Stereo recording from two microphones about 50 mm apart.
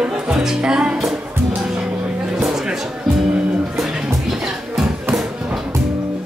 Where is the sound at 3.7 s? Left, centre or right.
Centre.